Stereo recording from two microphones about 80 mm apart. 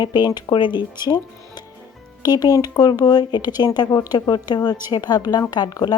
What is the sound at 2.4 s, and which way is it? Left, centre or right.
Speech, left.